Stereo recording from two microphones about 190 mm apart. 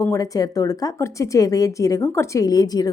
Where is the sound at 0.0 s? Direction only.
15° left (ahead or behind).